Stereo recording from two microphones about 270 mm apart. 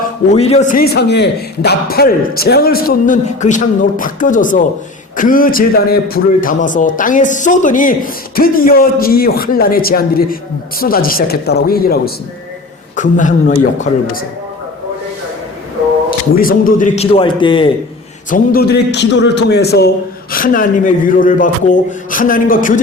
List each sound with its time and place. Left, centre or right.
0.3 s a man's voice: left
16.0 s a man's voice: left
18.3 s a man's voice: left